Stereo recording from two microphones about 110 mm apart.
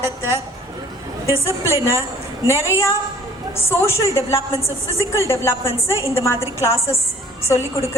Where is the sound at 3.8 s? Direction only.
25° left (ahead or behind).